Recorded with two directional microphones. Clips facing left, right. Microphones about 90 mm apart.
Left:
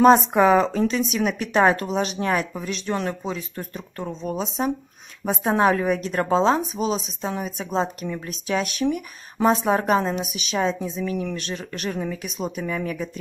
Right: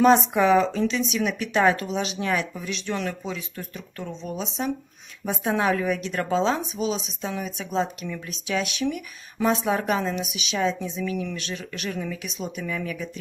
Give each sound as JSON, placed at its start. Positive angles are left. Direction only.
{"t": 0.3, "sound": "a woman's voice", "side_deg": 40}